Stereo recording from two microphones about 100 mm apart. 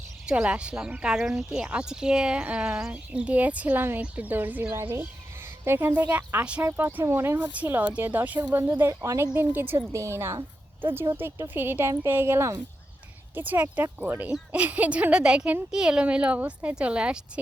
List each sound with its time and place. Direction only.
0.3 s a woman's voice: 10° right (ahead or behind)